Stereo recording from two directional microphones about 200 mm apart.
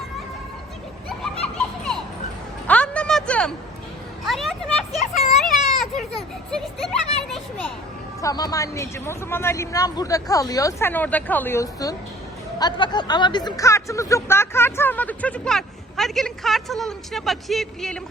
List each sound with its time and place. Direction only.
2.6 s a sound: 5° left (ahead or behind)
7.2 s children playing: 5° left (ahead or behind)
8.2 s speech: 20° left (ahead or behind); by 18.0 s centre (ahead or behind)